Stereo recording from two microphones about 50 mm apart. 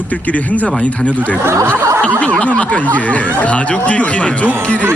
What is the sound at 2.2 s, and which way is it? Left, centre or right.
Speech, left.